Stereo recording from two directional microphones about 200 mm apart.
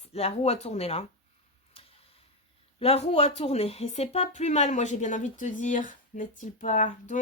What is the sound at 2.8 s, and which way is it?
Speech, 30° left (ahead or behind).